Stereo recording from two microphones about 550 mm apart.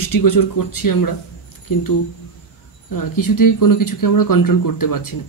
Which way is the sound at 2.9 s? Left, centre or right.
Left.